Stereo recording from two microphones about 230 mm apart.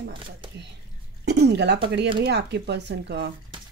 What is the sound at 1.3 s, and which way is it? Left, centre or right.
Speech, right.